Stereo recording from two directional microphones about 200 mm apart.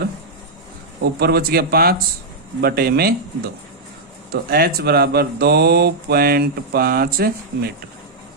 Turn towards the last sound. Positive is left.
turn(degrees=-50)  # may be behind; listen again after turning